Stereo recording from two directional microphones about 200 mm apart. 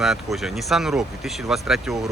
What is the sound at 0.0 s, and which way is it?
Speech, centre (ahead or behind).